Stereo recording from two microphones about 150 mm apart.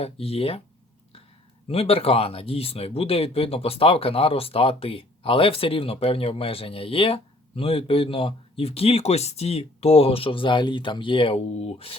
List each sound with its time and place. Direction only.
0.0 s speech: 40° left (ahead or behind)
1.6 s speech: 40° left (ahead or behind)